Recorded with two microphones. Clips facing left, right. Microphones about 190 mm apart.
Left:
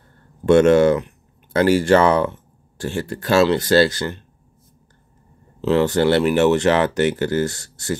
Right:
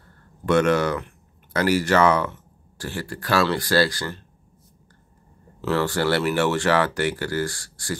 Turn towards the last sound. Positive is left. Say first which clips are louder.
# left 5 dB
turn(degrees=25)  # may be behind; listen again after turning